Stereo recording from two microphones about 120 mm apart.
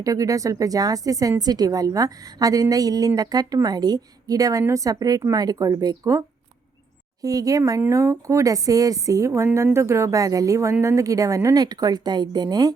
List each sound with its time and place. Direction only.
0.0 s a woman's voice: 30° right (ahead or behind)